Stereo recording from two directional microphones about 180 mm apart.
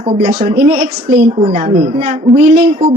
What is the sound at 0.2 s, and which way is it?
Speech, 35° right (ahead or behind).